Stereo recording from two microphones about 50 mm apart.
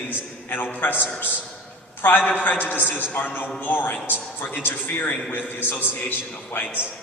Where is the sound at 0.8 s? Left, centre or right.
Left.